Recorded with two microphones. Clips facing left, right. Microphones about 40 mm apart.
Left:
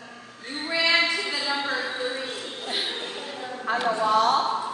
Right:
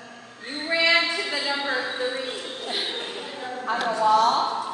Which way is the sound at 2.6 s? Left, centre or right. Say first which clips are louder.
Even; centre.